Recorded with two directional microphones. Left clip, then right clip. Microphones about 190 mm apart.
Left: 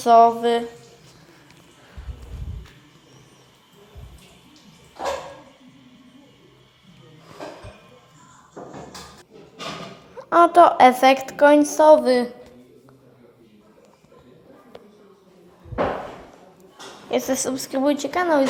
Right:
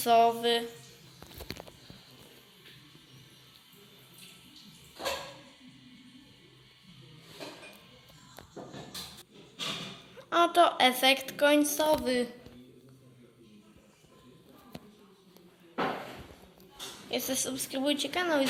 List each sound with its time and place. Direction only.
0.0 s a woman's voice: 15° left (ahead or behind)
10.2 s a woman's voice: 20° left (ahead or behind)
17.1 s a woman's voice: 20° left (ahead or behind)